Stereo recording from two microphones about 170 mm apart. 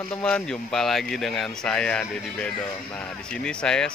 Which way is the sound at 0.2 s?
5° left (ahead or behind).